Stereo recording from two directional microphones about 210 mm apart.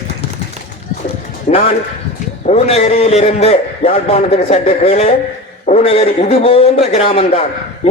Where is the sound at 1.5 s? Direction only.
40° left (ahead or behind).